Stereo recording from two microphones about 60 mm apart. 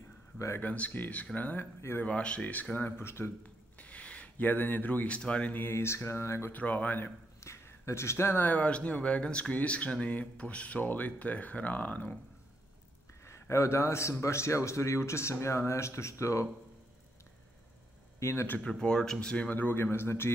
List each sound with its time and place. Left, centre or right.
0.6 s speech: left
3.0 s speech: left
3.7 s speech: left
5.6 s speech: left
6.5 s speech: left
7.3 s speech: left
13.2 s a man's voice: left
18.2 s speech: left
18.6 s speech: centre
19.5 s speech: left